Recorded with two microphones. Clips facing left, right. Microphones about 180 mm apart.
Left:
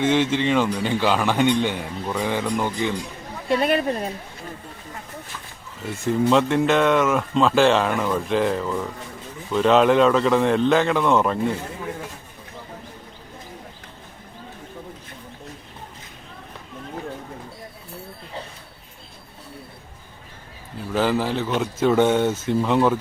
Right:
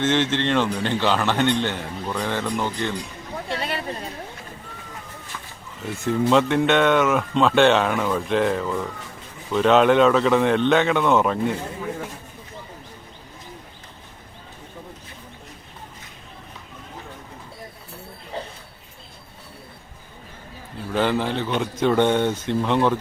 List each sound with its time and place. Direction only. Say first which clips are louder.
0.0 s a man's voice: left 2 dB; 10° left (ahead or behind)
3.6 s speech: left 11 dB; 50° left (ahead or behind)
5.8 s a man's voice: left 1 dB; centre (ahead or behind)
20.9 s a man's voice: left 1 dB; 5° left (ahead or behind)